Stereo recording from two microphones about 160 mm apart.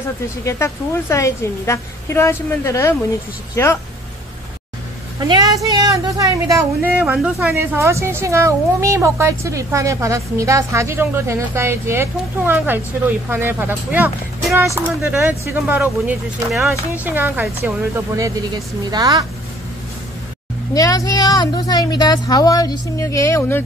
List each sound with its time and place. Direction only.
0.5 s a woman's voice: 15° left (ahead or behind)
5.3 s speech: 20° right (ahead or behind)
20.7 s speech: 20° left (ahead or behind)